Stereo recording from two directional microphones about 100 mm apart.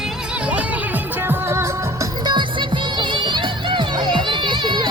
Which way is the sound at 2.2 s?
50° right (ahead or behind).